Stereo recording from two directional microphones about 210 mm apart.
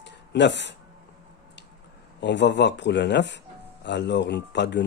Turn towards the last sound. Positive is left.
turn(degrees=55)  # may be behind; listen again after turning